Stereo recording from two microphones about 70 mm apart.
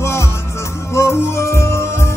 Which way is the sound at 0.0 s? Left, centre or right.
Left.